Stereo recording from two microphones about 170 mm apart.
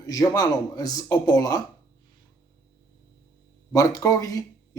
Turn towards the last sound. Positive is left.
turn(degrees=20)  # may be behind; listen again after turning